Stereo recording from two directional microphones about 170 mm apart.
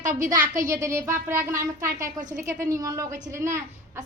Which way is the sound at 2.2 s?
50° right (ahead or behind).